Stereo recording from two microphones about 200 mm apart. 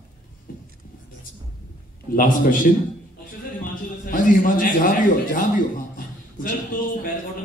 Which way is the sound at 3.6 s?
45° left (ahead or behind).